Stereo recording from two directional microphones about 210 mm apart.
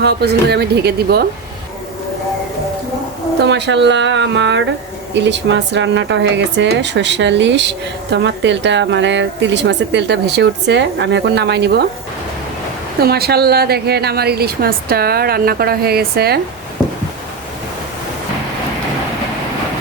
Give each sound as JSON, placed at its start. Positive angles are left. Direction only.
{"t": 0.0, "sound": "a woman's voice", "side_deg": -50}
{"t": 3.4, "sound": "speech", "side_deg": -55}
{"t": 13.0, "sound": "a woman's voice", "side_deg": -50}